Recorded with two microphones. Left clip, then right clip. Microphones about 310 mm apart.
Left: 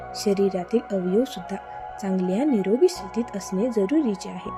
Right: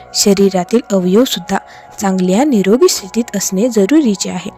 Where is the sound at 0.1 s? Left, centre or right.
Right.